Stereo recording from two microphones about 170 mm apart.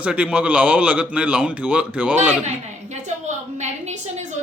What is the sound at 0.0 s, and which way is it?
A man's voice, 5° right (ahead or behind).